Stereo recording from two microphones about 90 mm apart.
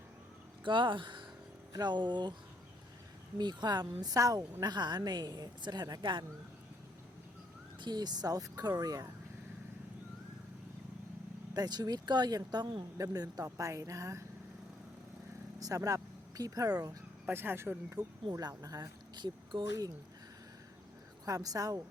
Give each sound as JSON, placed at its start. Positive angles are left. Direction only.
{"t": 0.6, "sound": "speech", "side_deg": -65}
{"t": 3.3, "sound": "speech", "side_deg": -50}
{"t": 4.6, "sound": "speech", "side_deg": -55}
{"t": 7.8, "sound": "speech", "side_deg": -50}
{"t": 11.5, "sound": "speech", "side_deg": -50}
{"t": 15.6, "sound": "speech", "side_deg": -40}
{"t": 17.2, "sound": "speech", "side_deg": -25}
{"t": 17.9, "sound": "speech", "side_deg": -45}
{"t": 21.2, "sound": "speech", "side_deg": -40}